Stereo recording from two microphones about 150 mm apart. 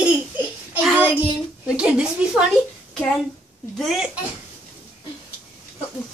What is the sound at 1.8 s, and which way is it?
Speech, 5° right (ahead or behind).